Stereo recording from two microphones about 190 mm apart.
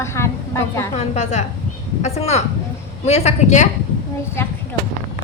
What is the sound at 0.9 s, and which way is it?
A woman's voice, 35° left (ahead or behind).